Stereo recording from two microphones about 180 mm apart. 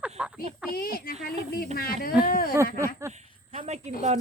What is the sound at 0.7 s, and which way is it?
Speech, 55° left (ahead or behind).